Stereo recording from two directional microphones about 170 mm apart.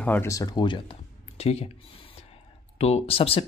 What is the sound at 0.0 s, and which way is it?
Speech, 10° left (ahead or behind).